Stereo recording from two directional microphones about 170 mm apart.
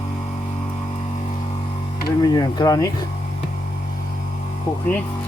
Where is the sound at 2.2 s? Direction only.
25° left (ahead or behind).